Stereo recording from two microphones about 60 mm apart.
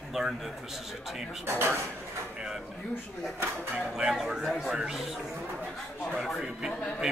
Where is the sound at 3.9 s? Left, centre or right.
Centre.